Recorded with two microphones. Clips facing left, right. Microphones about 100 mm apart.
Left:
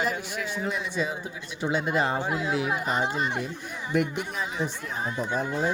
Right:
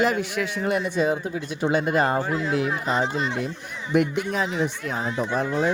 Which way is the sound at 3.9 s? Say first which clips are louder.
Right 5 dB; 85° right.